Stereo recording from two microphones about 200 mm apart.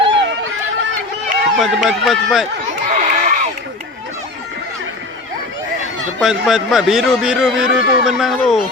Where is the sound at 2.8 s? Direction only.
40° right (ahead or behind).